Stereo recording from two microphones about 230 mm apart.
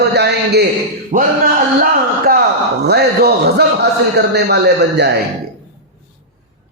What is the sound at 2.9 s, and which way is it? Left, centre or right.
A man's voice, right.